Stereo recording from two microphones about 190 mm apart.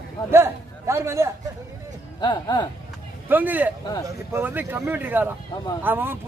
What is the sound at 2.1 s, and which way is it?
Speech, 25° left (ahead or behind).